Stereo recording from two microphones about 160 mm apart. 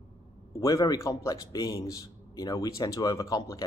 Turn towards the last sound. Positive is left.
turn(degrees=20)  # may be behind; listen again after turning